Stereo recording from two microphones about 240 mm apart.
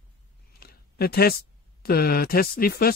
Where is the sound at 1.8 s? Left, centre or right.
Left.